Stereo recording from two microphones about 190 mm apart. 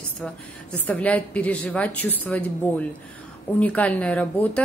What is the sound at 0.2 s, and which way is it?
A woman's voice, 5° left (ahead or behind).